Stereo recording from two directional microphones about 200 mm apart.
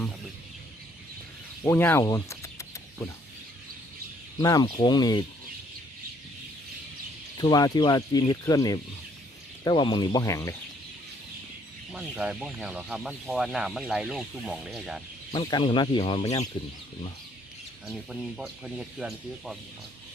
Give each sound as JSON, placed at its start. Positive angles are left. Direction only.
{"t": 1.6, "sound": "a sound", "side_deg": 10}
{"t": 4.4, "sound": "speech", "side_deg": 20}
{"t": 7.3, "sound": "speech", "side_deg": 20}
{"t": 11.9, "sound": "speech", "side_deg": -5}
{"t": 15.3, "sound": "speech", "side_deg": 25}
{"t": 17.8, "sound": "speech", "side_deg": -5}